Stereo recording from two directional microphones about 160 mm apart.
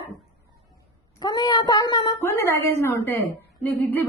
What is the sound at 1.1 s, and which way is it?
A woman's voice, 25° left (ahead or behind).